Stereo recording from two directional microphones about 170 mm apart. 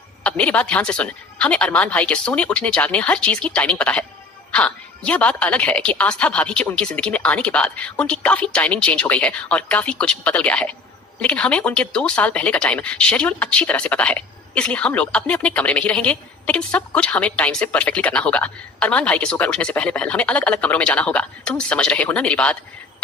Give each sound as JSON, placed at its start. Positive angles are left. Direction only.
{"t": 0.2, "sound": "speech", "side_deg": 5}